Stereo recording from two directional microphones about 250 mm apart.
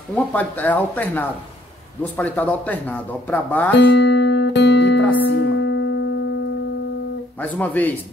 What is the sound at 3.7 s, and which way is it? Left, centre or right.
Music, left.